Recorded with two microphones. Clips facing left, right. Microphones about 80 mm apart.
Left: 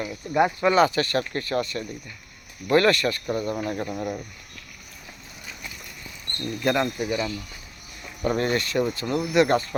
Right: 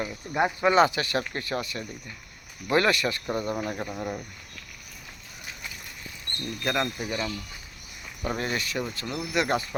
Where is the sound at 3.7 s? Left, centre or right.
Centre.